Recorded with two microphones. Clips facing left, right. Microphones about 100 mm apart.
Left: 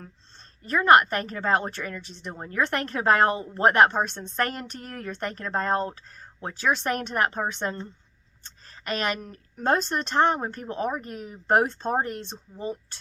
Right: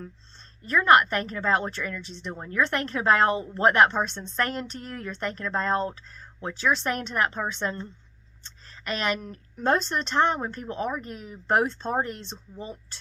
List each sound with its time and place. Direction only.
0.0 s a woman's voice: 45° left (ahead or behind)
8.4 s a sound: 45° left (ahead or behind)
9.6 s a woman's voice: 45° left (ahead or behind)